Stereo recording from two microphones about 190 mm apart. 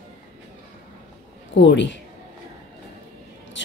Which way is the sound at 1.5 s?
70° left (ahead or behind).